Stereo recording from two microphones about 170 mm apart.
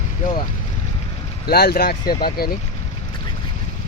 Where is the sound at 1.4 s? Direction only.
65° left (ahead or behind).